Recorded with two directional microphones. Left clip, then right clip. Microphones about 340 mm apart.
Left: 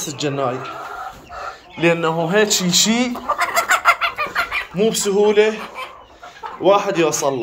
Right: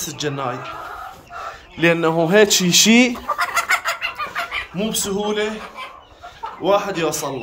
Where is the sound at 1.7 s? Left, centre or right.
Centre; by 3.2 s right.